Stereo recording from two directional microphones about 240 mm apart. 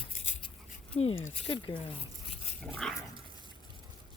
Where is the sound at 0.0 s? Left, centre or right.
Left.